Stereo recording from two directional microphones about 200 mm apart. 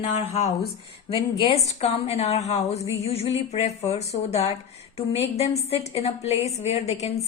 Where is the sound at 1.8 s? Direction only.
30° left (ahead or behind).